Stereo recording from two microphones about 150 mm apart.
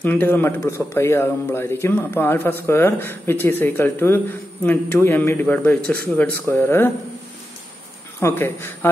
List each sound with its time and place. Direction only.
0.0 s a man's voice: 10° left (ahead or behind)
8.2 s a man's voice: 15° left (ahead or behind)